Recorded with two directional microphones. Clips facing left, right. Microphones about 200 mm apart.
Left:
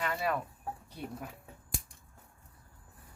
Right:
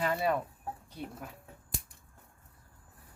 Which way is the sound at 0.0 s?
30° right (ahead or behind).